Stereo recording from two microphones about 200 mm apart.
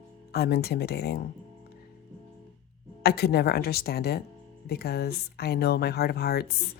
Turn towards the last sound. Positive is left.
turn(degrees=50)  # may be behind; listen again after turning